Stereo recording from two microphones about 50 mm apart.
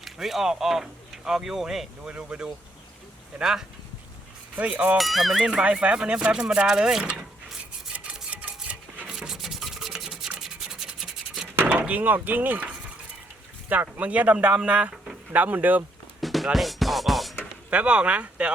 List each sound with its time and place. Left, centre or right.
0.0 s speech: centre
2.0 s speech: right
4.5 s speech: right
4.9 s speech: centre
5.4 s speech: centre
7.0 s speech: right
8.3 s a sound: right
9.1 s rub: centre
11.5 s a sound: right
11.9 s speech: right
13.9 s speech: right
16.2 s music: centre
17.7 s speech: right